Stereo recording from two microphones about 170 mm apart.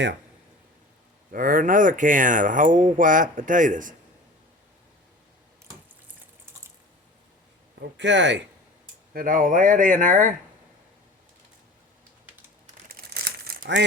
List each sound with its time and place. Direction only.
1.3 s speech: 55° right (ahead or behind)
7.8 s speech: 90° right
9.1 s speech: 55° right (ahead or behind)
12.9 s crumpling: 60° right (ahead or behind)